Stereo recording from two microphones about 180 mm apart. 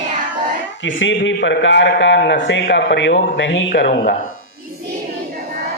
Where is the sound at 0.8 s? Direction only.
90° left.